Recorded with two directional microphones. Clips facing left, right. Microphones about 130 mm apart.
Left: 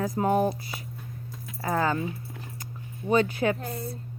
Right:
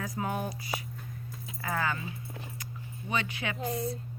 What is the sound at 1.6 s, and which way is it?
Speech, 30° left (ahead or behind).